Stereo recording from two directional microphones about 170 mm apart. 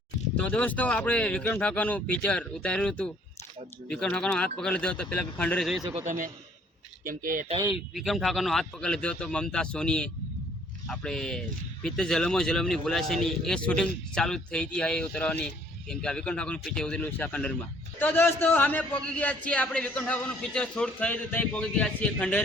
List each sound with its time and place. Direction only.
0.3 s a man's voice: 10° left (ahead or behind)
6.1 s a man's voice: 50° right (ahead or behind)
7.7 s a man's voice: centre (ahead or behind)